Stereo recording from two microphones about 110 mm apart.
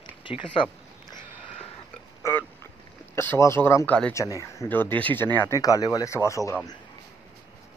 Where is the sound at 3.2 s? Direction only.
25° left (ahead or behind).